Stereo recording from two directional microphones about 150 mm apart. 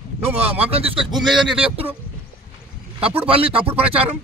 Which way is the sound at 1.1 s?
Centre (ahead or behind).